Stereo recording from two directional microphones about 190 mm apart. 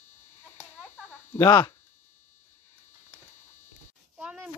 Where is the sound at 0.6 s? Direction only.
10° left (ahead or behind).